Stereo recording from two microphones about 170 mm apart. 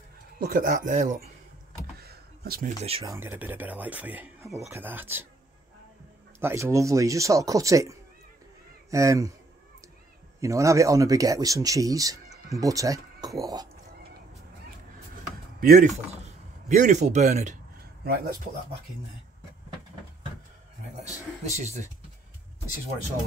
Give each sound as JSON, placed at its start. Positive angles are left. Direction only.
{"t": 0.4, "sound": "a man's voice", "side_deg": -55}
{"t": 2.0, "sound": "a sound", "side_deg": -65}
{"t": 2.8, "sound": "speech", "side_deg": -35}
{"t": 3.1, "sound": "speech", "side_deg": -15}
{"t": 6.4, "sound": "speech", "side_deg": -15}
{"t": 10.4, "sound": "speech", "side_deg": -20}
{"t": 15.6, "sound": "speech", "side_deg": -60}
{"t": 16.1, "sound": "speech", "side_deg": -40}
{"t": 18.0, "sound": "speech", "side_deg": -65}
{"t": 21.5, "sound": "speech", "side_deg": -40}